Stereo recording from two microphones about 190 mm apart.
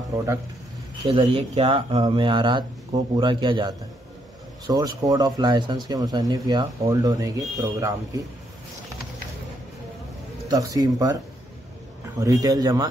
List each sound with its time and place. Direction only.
1.0 s speech: 30° right (ahead or behind)
10.5 s speech: 20° right (ahead or behind)
12.2 s speech: 20° right (ahead or behind)